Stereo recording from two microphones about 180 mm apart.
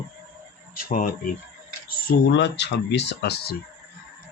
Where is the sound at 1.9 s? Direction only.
65° left (ahead or behind).